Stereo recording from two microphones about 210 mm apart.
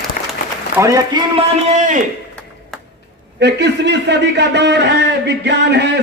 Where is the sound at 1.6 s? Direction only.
35° right (ahead or behind).